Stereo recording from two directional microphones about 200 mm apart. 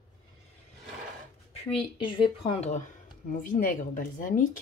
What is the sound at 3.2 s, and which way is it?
Speech, 45° left (ahead or behind).